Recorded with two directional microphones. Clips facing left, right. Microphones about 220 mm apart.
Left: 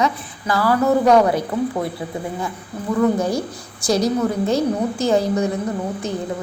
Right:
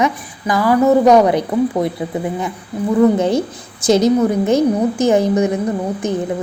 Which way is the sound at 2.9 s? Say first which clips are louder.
Right 5 dB; 20° right (ahead or behind).